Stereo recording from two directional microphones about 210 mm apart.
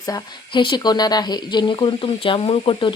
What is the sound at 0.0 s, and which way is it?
Speech, 20° left (ahead or behind).